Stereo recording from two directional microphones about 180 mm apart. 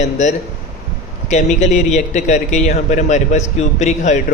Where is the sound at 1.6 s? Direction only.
40° left (ahead or behind).